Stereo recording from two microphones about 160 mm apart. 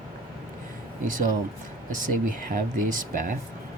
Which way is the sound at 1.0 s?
55° right (ahead or behind).